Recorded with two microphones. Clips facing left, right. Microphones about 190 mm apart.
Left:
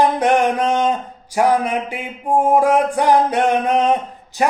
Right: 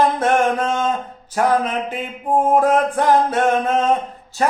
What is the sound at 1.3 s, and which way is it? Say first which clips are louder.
Mantra: left 2 dB; 10° left (ahead or behind).